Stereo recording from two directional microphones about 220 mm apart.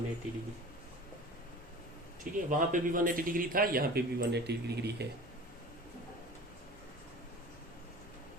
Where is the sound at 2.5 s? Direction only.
40° right (ahead or behind).